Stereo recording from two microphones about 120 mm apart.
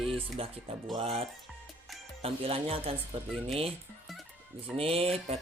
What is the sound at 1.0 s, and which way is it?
Speech, 55° right (ahead or behind).